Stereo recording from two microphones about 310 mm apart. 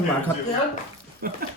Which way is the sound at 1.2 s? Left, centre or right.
Right.